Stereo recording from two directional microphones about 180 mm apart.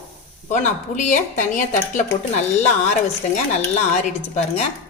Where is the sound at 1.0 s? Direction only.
45° left (ahead or behind).